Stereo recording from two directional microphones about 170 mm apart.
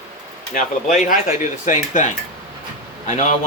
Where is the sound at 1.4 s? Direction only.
45° left (ahead or behind).